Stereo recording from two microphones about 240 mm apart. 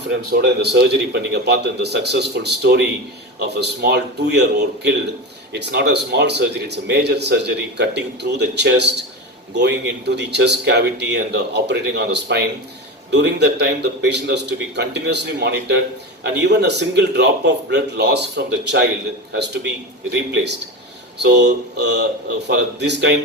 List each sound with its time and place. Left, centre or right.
0.3 s a man's voice: right
20.1 s a man's voice: right